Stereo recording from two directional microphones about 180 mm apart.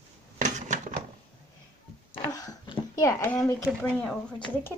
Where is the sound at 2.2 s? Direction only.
20° left (ahead or behind); by 4.4 s 5° left (ahead or behind).